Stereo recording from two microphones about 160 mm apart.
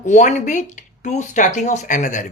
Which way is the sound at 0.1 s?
45° left (ahead or behind).